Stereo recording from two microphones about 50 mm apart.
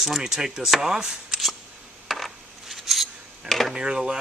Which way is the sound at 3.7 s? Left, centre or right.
Centre.